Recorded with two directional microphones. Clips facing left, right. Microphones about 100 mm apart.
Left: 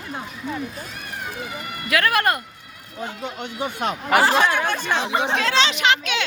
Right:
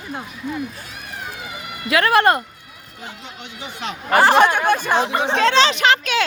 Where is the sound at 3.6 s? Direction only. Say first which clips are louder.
Left 5 dB; 50° left (ahead or behind).